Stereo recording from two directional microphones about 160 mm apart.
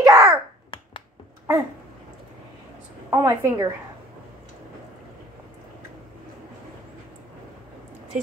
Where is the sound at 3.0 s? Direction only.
20° right (ahead or behind).